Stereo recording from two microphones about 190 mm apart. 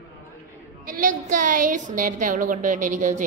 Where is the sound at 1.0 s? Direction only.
45° right (ahead or behind).